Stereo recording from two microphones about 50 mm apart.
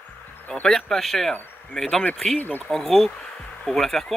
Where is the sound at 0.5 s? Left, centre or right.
Centre.